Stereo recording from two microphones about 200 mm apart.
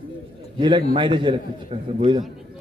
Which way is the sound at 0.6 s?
25° right (ahead or behind).